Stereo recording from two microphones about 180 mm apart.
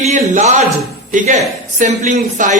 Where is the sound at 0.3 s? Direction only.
40° right (ahead or behind).